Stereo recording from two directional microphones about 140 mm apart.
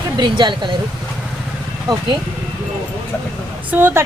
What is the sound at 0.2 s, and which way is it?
Speech, 30° right (ahead or behind).